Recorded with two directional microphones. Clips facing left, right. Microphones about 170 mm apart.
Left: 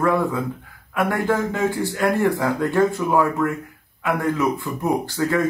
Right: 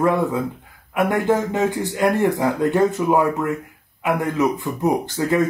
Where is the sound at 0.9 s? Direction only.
20° right (ahead or behind).